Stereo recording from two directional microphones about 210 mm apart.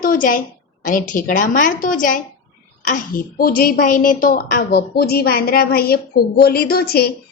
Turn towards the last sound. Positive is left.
turn(degrees=45)  # may be behind; listen again after turning